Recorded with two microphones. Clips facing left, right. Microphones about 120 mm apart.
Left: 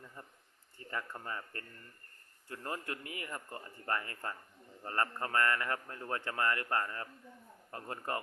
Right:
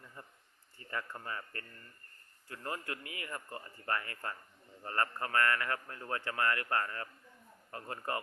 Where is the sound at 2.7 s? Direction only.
20° left (ahead or behind).